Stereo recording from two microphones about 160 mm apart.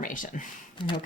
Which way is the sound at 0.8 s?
30° left (ahead or behind).